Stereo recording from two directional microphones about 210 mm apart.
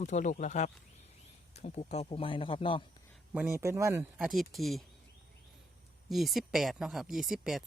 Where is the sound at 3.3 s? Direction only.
10° right (ahead or behind).